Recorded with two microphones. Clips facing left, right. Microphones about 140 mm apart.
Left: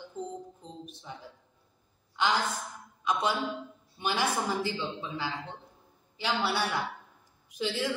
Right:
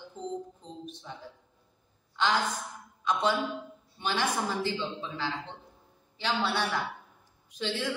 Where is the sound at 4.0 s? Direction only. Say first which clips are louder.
Even; 10° left (ahead or behind).